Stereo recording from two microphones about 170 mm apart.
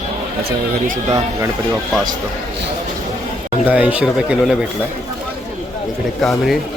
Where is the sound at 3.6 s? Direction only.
10° right (ahead or behind).